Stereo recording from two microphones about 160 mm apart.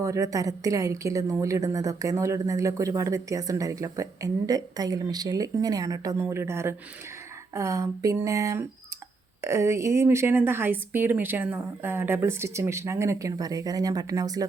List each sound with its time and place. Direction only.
0.0 s a woman's voice: 20° right (ahead or behind)